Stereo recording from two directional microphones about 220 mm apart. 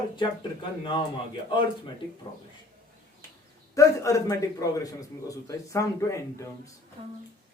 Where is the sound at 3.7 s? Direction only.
15° left (ahead or behind).